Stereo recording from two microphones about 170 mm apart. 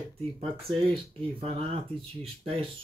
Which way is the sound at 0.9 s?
30° right (ahead or behind).